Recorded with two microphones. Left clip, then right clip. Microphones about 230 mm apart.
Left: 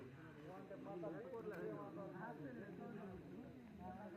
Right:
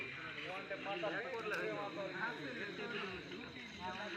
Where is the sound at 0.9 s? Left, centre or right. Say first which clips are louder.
Right 9 dB; centre.